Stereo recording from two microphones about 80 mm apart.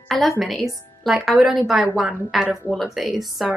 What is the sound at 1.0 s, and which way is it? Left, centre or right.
A woman's voice, centre.